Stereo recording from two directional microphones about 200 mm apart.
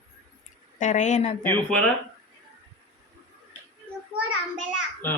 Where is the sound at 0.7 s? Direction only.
35° left (ahead or behind).